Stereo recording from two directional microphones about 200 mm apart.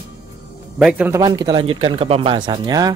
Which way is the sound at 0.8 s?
5° right (ahead or behind).